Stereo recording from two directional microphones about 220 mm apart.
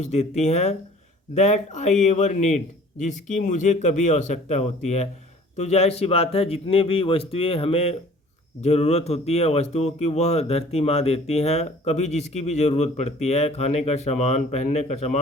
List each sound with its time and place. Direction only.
0.0 s a man's voice: 30° left (ahead or behind)